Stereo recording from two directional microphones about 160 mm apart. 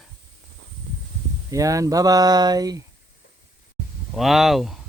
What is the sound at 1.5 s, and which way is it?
Speech, 20° right (ahead or behind).